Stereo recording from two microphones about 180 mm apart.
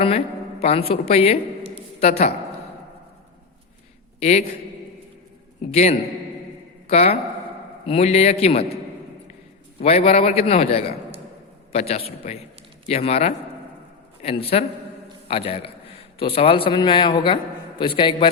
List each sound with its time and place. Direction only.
0.6 s a man's voice: 35° left (ahead or behind)
4.2 s a man's voice: 40° left (ahead or behind)
5.7 s a man's voice: 35° left (ahead or behind)
9.8 s a man's voice: 35° left (ahead or behind)